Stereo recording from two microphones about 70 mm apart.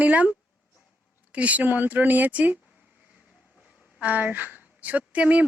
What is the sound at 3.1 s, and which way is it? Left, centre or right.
Vehicle, centre.